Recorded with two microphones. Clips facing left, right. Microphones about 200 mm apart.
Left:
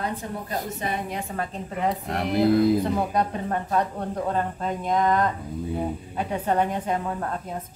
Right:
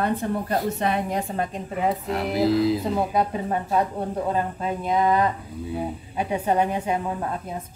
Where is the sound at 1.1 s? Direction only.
35° right (ahead or behind).